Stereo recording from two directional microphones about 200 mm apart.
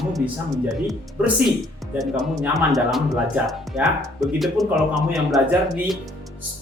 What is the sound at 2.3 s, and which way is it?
Speech, centre (ahead or behind).